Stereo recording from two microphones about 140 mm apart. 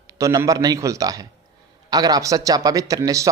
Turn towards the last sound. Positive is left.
turn(degrees=-25)  # may be behind; listen again after turning